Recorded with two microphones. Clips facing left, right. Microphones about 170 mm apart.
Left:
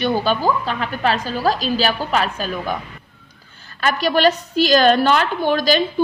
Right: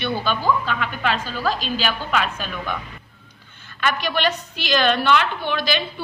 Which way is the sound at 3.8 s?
40° left (ahead or behind).